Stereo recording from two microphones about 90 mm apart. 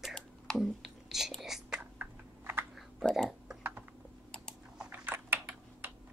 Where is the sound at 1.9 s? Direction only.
25° right (ahead or behind).